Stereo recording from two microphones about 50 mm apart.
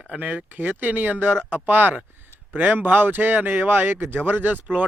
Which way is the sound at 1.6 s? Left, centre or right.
Right.